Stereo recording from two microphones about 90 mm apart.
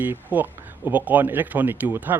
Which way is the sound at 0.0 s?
20° right (ahead or behind).